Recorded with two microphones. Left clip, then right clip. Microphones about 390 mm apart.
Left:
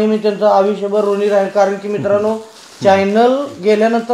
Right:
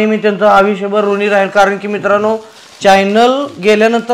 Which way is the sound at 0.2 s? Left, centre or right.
Right.